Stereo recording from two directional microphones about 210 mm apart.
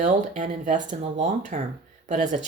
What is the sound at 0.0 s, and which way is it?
Speech, 35° right (ahead or behind).